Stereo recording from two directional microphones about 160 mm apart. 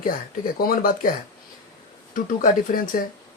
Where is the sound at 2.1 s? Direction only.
60° left (ahead or behind).